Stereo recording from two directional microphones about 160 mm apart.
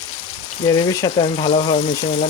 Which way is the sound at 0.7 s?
25° left (ahead or behind).